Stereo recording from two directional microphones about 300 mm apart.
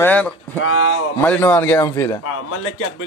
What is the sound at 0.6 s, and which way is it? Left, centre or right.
Speech, left.